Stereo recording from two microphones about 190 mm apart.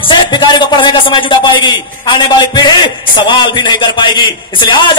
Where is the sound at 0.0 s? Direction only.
25° left (ahead or behind).